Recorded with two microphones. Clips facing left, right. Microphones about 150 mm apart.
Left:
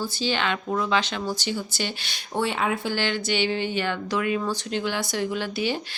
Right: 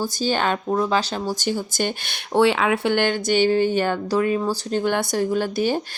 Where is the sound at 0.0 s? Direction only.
45° right (ahead or behind).